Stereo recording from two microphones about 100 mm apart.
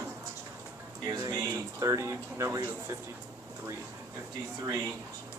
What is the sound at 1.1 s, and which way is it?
Speech, 35° right (ahead or behind).